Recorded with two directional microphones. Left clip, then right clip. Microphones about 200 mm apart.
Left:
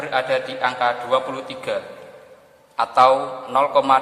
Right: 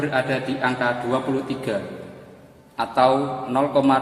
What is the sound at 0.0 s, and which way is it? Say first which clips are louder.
A man's voice: left 2 dB; 35° left (ahead or behind).